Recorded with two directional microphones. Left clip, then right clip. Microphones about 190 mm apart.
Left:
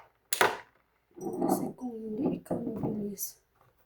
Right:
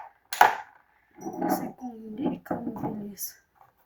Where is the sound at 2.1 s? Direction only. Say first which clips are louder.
Right 1 dB; 15° left (ahead or behind).